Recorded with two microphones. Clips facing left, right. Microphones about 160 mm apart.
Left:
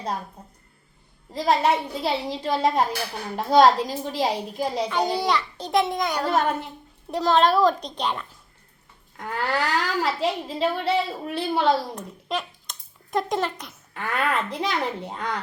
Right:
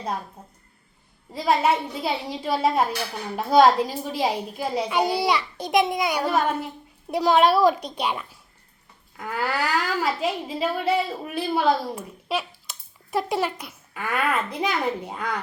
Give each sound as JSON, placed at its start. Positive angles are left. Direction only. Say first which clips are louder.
{"t": 1.3, "sound": "a woman's voice", "louder": "even", "side_deg": -5}